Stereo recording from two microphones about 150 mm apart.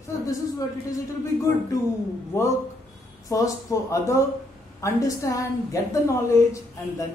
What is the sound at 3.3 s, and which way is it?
A woman's voice, 25° left (ahead or behind).